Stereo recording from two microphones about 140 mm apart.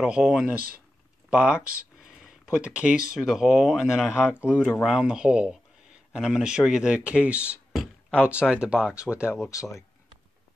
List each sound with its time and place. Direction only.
0.0 s speech: 5° right (ahead or behind)
2.0 s a sound: 5° right (ahead or behind)
3.1 s speech: 5° right (ahead or behind)
9.5 s speech: 20° left (ahead or behind)